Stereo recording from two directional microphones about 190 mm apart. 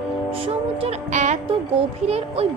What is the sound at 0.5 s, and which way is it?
A woman's voice, 30° right (ahead or behind).